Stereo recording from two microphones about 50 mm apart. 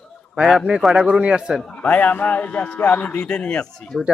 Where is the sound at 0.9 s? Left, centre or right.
Right.